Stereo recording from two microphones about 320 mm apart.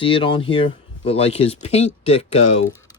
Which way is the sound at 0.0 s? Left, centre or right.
Centre.